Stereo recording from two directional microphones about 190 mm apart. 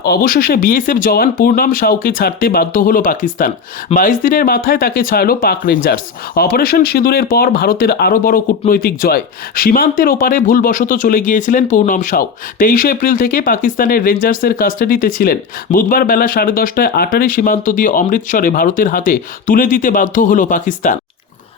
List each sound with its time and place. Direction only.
0.0 s speech: 50° left (ahead or behind)